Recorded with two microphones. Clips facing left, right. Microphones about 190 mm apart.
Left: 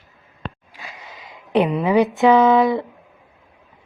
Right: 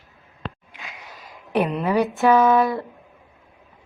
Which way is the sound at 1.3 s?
15° left (ahead or behind).